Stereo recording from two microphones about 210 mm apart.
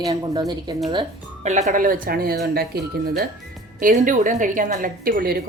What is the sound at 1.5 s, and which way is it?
A woman's voice, 35° right (ahead or behind).